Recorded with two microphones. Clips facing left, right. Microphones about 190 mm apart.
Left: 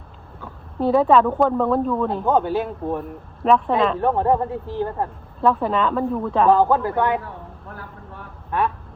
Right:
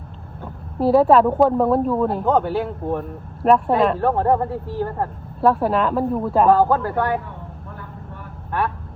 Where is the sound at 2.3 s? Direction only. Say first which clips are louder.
Left 2 dB; 20° left (ahead or behind).